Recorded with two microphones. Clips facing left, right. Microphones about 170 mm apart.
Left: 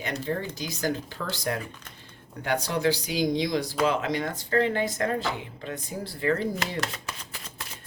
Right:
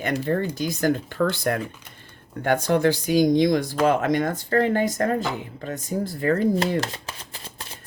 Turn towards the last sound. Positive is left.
turn(degrees=-30)  # may be behind; listen again after turning